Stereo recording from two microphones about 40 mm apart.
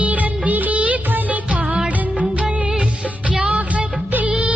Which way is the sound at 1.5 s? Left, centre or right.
Right.